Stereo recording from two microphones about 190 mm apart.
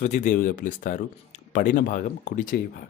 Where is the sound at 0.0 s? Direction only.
40° left (ahead or behind).